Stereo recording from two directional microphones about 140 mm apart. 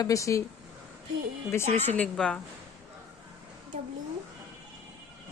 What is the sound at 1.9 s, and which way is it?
Speech, 5° left (ahead or behind).